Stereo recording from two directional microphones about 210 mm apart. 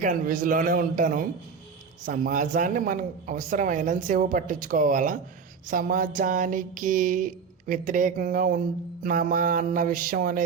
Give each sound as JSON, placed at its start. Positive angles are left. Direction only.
{"t": 0.0, "sound": "speech", "side_deg": -40}